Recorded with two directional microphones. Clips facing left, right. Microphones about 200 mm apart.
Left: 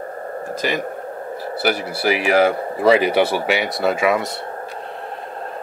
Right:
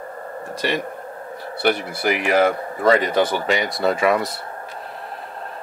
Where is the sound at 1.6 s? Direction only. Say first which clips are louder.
Right 1 dB; 5° left (ahead or behind).